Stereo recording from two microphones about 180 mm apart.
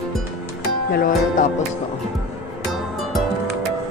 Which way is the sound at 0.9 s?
50° left (ahead or behind).